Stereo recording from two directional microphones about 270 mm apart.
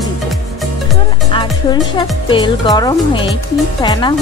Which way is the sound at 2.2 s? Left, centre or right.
Centre.